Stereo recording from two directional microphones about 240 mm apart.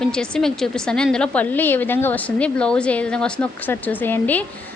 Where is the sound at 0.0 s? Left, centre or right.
Centre.